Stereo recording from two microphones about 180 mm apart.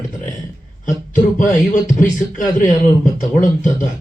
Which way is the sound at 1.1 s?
45° left (ahead or behind).